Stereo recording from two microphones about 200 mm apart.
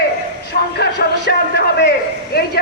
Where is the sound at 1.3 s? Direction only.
60° left (ahead or behind).